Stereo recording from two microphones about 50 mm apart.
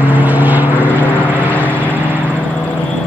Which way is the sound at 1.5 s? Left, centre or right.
Left.